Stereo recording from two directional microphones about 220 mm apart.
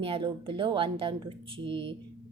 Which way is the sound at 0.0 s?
25° right (ahead or behind).